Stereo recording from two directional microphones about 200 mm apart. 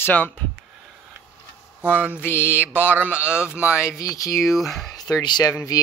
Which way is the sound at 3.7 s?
15° left (ahead or behind).